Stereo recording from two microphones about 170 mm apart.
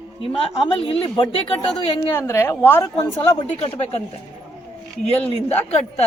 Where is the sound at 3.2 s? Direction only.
30° left (ahead or behind).